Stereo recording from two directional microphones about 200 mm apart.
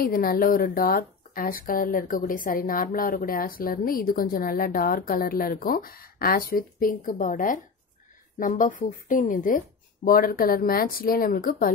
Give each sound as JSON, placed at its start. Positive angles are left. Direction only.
{"t": 0.0, "sound": "speech", "side_deg": 45}